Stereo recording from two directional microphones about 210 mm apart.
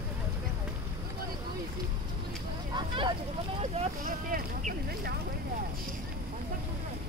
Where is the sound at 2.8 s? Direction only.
20° right (ahead or behind).